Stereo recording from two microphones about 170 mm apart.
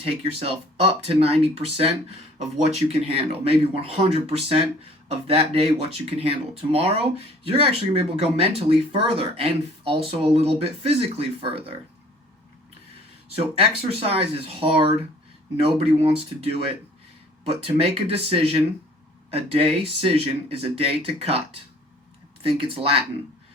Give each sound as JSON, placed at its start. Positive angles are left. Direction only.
{"t": 0.3, "sound": "speech", "side_deg": -35}
{"t": 13.4, "sound": "speech", "side_deg": -35}